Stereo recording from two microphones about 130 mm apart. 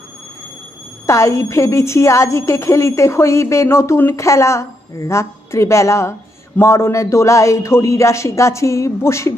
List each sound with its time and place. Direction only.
1.0 s a woman's voice: 25° left (ahead or behind)